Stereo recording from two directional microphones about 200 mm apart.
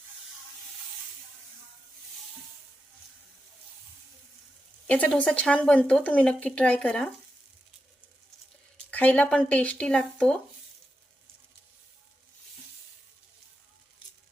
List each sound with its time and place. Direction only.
4.9 s a woman's voice: 5° left (ahead or behind)
8.9 s a woman's voice: 5° left (ahead or behind)